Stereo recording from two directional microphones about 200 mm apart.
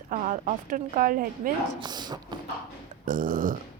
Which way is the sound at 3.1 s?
45° right (ahead or behind).